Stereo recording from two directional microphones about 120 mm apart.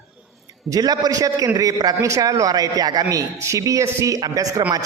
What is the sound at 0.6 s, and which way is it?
A woman's voice, 30° right (ahead or behind).